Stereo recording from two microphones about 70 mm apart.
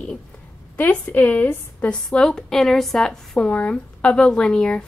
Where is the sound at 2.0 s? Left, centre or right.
Centre.